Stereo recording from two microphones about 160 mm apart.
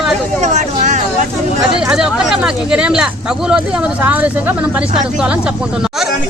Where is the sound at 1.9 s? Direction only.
5° right (ahead or behind).